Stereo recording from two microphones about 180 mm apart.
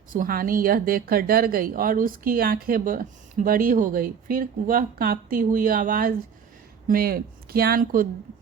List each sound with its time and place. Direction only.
0.1 s a woman's voice: 50° right (ahead or behind)